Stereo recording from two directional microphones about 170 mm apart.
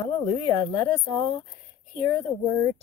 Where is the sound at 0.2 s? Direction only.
25° left (ahead or behind).